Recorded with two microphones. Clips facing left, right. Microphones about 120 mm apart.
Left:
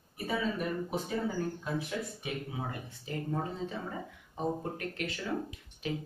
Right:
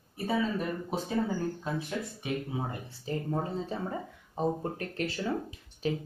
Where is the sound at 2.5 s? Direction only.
30° right (ahead or behind).